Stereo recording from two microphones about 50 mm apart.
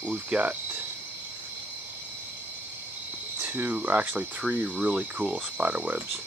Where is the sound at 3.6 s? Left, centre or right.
Right.